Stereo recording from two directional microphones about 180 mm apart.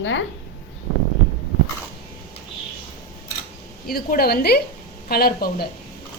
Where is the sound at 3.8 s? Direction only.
55° left (ahead or behind).